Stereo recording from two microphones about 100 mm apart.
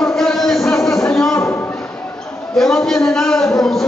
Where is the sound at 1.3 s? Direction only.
30° left (ahead or behind).